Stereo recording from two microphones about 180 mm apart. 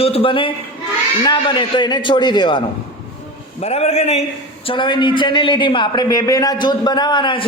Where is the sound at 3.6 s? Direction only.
35° left (ahead or behind).